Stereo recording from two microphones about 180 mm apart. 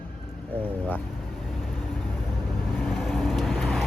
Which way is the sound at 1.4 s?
Centre (ahead or behind).